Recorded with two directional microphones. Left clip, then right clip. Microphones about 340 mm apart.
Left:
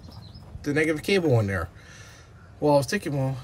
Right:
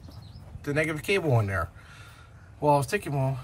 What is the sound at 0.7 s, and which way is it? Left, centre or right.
Speech, centre.